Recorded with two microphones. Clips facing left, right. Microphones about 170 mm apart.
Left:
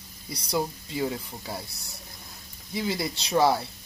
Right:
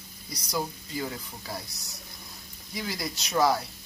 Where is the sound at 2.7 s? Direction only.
25° left (ahead or behind).